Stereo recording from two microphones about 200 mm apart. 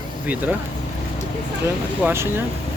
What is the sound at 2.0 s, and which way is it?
Speech, 10° right (ahead or behind).